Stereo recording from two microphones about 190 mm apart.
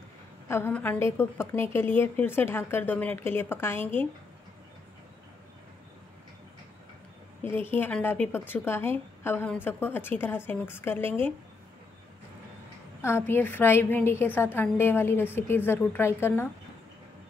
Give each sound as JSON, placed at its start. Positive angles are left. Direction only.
{"t": 0.5, "sound": "a woman's voice", "side_deg": 10}
{"t": 7.4, "sound": "a woman's voice", "side_deg": 10}
{"t": 13.0, "sound": "a woman's voice", "side_deg": 10}